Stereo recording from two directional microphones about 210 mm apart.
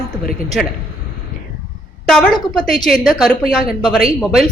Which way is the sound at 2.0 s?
5° left (ahead or behind).